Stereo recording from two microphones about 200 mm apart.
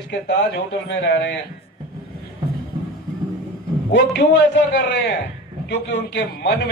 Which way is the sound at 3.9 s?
60° left (ahead or behind).